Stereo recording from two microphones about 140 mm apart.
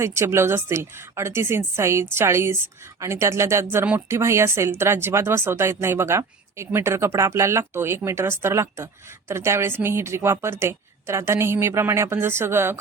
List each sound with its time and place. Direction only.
0.0 s a woman's voice: 20° right (ahead or behind)